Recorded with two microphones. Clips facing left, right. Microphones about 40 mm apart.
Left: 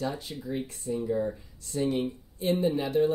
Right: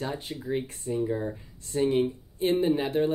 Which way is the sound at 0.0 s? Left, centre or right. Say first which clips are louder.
Even; right.